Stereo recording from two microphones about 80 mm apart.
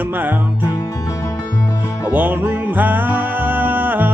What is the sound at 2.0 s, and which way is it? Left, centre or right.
Music, right.